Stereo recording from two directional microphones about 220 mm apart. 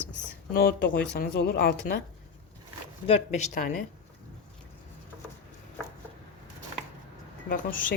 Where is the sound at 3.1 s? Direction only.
30° left (ahead or behind).